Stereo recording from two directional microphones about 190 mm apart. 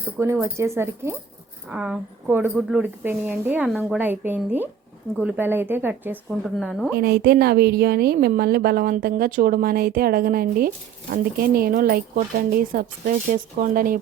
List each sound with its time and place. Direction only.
0.2 s a woman's voice: 15° right (ahead or behind)
6.9 s a woman's voice: 55° right (ahead or behind)